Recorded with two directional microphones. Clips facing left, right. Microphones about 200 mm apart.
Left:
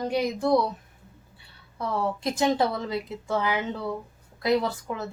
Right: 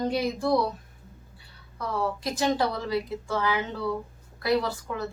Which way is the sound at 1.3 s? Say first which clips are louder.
Left 3 dB; 25° left (ahead or behind).